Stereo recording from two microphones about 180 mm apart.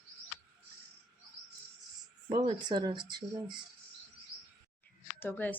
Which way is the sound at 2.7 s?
25° right (ahead or behind).